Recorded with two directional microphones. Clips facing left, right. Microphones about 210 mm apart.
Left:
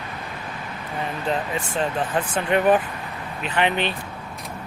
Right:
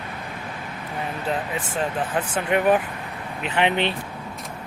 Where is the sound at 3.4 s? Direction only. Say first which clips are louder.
Right 1 dB; 20° right (ahead or behind).